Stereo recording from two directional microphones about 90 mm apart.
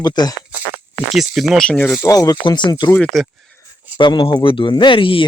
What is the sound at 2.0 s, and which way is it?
Speech, 40° left (ahead or behind).